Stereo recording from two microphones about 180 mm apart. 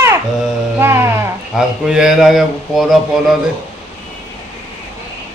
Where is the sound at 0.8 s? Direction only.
15° right (ahead or behind).